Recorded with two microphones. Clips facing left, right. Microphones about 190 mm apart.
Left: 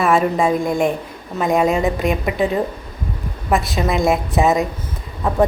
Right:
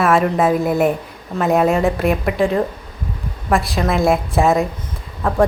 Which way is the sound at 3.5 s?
Centre (ahead or behind).